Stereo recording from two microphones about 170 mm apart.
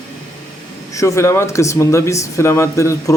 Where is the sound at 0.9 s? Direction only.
15° left (ahead or behind).